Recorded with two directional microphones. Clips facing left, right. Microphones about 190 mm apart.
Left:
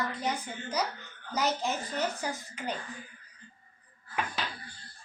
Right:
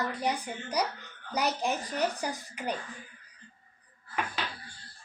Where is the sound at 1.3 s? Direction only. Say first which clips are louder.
Right 1 dB; 15° right (ahead or behind).